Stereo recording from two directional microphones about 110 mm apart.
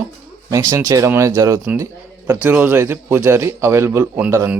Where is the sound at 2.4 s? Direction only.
20° right (ahead or behind).